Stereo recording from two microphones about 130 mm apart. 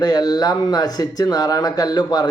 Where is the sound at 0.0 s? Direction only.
30° left (ahead or behind).